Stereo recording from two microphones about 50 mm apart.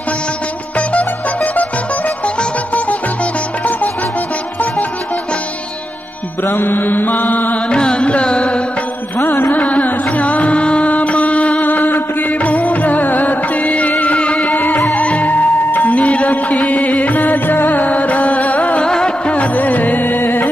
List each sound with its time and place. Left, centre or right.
0.7 s music: left
6.4 s mantra: left
7.7 s carnatic music: centre
9.2 s music: left
9.6 s carnatic music: left
10.1 s music: left
14.4 s music: left
18.9 s music: centre; by 20.4 s left